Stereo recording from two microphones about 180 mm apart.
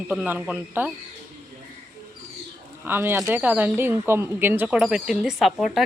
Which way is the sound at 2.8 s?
10° right (ahead or behind).